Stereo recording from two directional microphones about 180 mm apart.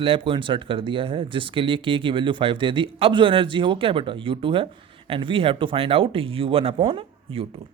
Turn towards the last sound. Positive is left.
turn(degrees=-30)  # may be behind; listen again after turning